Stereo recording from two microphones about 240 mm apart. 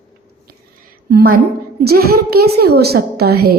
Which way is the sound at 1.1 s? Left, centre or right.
Right.